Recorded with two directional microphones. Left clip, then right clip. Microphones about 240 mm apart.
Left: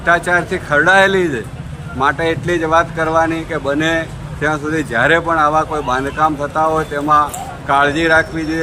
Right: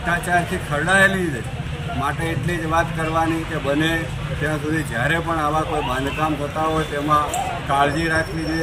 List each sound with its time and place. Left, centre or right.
0.0 s speech: left